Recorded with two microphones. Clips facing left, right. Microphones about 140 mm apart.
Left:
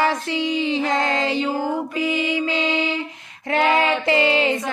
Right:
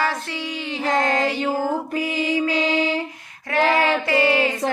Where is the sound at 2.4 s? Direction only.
25° left (ahead or behind).